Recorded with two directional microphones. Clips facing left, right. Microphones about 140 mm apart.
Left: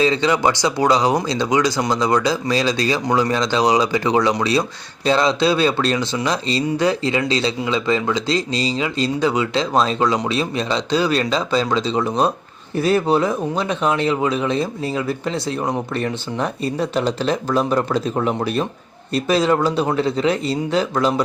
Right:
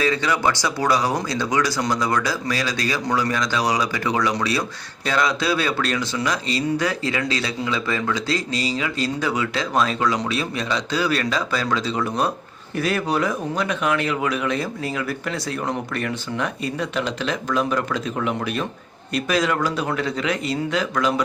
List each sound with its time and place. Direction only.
0.0 s speech: 25° left (ahead or behind)